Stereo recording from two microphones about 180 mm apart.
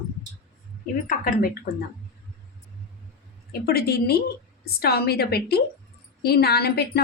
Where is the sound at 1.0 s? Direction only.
50° left (ahead or behind).